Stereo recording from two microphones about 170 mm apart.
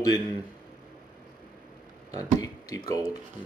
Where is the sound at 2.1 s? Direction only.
20° left (ahead or behind).